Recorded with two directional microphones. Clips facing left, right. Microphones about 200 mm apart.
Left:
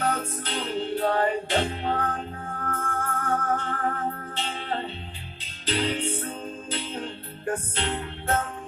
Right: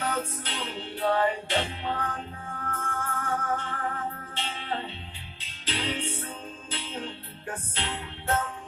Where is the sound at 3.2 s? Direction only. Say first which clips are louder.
Left 4 dB; 40° left (ahead or behind).